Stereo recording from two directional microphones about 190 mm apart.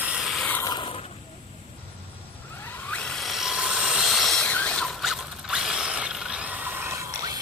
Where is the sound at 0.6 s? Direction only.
20° left (ahead or behind).